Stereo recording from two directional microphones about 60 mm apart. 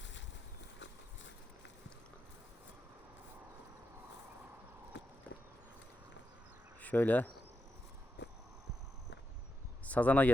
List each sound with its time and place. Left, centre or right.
6.8 s speech: left
9.8 s speech: left